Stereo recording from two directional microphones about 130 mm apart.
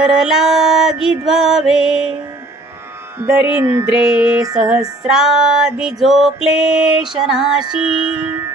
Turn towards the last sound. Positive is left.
turn(degrees=-5)  # may be behind; listen again after turning